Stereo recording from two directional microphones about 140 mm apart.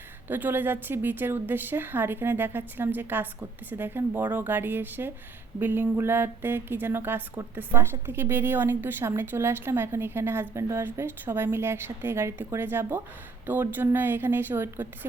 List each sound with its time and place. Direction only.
0.3 s speech: 15° right (ahead or behind)